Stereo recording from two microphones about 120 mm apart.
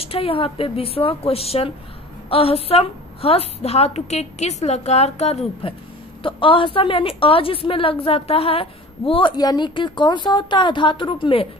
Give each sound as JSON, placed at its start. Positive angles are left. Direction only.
{"t": 0.0, "sound": "a woman's voice", "side_deg": 50}
{"t": 9.4, "sound": "a woman's voice", "side_deg": 35}